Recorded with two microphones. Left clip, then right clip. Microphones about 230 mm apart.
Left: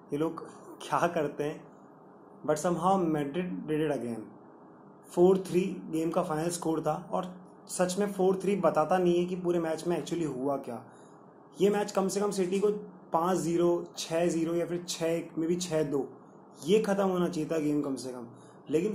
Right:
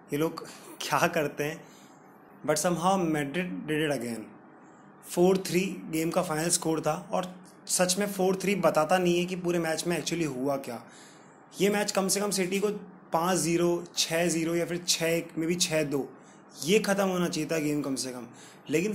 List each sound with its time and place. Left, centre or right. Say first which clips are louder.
0.1 s speech: right 2 dB; right